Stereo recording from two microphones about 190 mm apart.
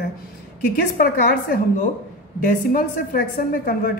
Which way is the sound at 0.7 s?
50° left (ahead or behind).